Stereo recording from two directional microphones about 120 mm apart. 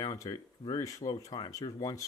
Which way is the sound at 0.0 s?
30° left (ahead or behind).